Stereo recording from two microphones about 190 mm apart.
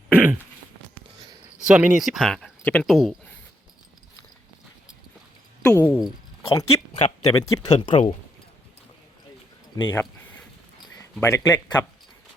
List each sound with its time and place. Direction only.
0.1 s throat clearing: 10° right (ahead or behind)
1.6 s speech: 5° right (ahead or behind)
5.6 s speech: 10° left (ahead or behind)
6.4 s speech: 25° left (ahead or behind)
6.9 s speech: 35° left (ahead or behind)
7.3 s speech: 20° left (ahead or behind)
9.9 s speech: 10° left (ahead or behind)